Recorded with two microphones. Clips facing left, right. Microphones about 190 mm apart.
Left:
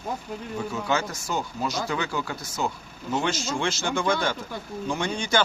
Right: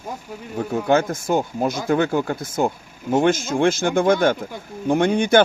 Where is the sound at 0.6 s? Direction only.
55° right (ahead or behind).